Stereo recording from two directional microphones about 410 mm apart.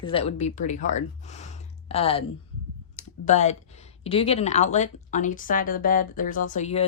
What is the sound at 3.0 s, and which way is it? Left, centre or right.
A woman's voice, centre.